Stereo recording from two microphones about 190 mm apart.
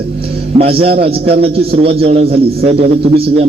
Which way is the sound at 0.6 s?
30° right (ahead or behind).